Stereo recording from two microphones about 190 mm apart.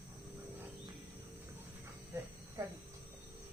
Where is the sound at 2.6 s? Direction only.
20° right (ahead or behind).